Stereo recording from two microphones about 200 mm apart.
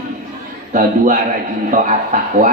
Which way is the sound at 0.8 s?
40° right (ahead or behind).